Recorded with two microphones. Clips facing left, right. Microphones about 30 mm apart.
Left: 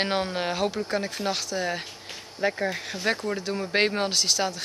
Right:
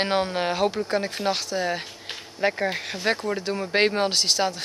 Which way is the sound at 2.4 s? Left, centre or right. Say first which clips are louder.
Right 2 dB; centre.